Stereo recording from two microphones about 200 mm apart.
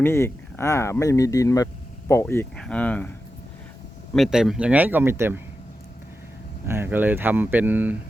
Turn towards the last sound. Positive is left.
turn(degrees=-10)  # may be behind; listen again after turning